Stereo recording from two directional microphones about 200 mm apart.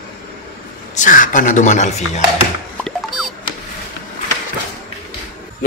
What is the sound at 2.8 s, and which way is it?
Music, centre (ahead or behind).